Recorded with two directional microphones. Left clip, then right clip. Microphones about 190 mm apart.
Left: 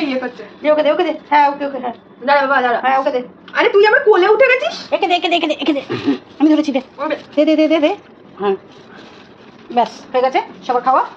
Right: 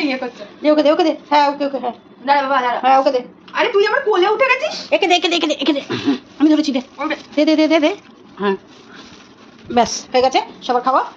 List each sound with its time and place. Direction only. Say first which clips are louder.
0.6 s a woman's voice: even; 35° right (ahead or behind)
2.2 s a woman's voice: left 2 dB; 20° right (ahead or behind)
2.8 s a woman's voice: right 2 dB; 30° right (ahead or behind)
3.5 s a woman's voice: left 4 dB; 20° right (ahead or behind)
4.9 s a woman's voice: right 1 dB; 40° right (ahead or behind)
5.6 s a woman's voice: even; 20° right (ahead or behind)
9.8 s a woman's voice: even; 35° right (ahead or behind)
10.6 s speech: left 3 dB; 15° right (ahead or behind)